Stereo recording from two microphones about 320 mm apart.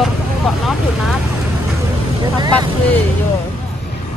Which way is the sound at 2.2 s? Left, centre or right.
Centre.